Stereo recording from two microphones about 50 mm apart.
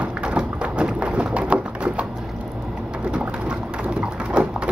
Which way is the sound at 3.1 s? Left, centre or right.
Centre.